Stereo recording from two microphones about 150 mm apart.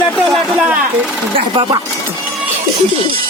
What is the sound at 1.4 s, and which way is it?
Speech, 35° right (ahead or behind).